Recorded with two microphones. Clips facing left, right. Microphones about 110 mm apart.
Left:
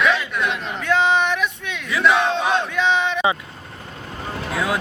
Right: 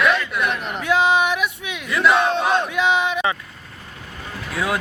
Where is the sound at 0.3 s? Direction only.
10° right (ahead or behind).